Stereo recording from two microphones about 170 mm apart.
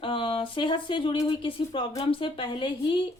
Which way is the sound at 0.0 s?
30° left (ahead or behind).